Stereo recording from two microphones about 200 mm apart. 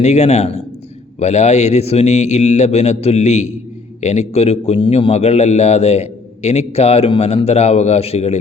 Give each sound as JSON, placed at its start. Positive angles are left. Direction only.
{"t": 0.0, "sound": "a man's voice", "side_deg": 35}